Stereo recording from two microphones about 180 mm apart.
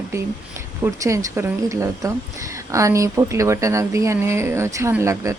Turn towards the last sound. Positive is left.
turn(degrees=-15)  # may be behind; listen again after turning